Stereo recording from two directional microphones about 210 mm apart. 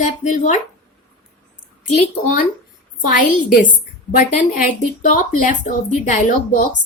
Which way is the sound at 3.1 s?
40° left (ahead or behind).